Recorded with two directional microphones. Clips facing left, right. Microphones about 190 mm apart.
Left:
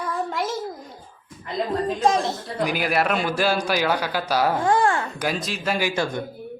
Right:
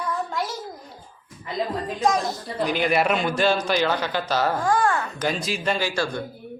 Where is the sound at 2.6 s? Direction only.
5° left (ahead or behind).